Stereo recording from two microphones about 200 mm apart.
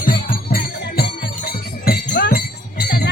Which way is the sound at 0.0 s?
45° left (ahead or behind).